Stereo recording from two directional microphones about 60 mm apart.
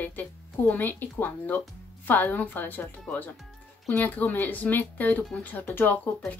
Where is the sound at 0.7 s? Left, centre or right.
Left.